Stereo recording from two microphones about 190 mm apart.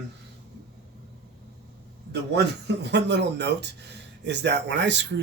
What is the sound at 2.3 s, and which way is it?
Speech, 60° right (ahead or behind).